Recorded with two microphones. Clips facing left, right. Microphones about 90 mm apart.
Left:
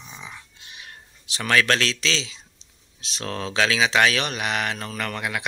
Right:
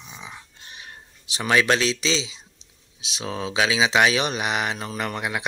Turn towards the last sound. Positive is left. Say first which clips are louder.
# right 1 dB
turn(degrees=-20)  # may be behind; listen again after turning